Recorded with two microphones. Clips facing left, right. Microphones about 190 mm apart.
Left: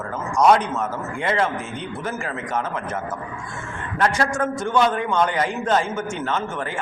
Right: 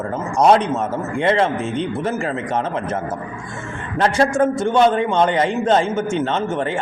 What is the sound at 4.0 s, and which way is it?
A man's voice, 30° right (ahead or behind).